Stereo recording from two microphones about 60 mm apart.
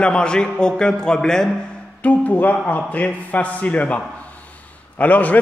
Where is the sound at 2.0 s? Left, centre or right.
Left.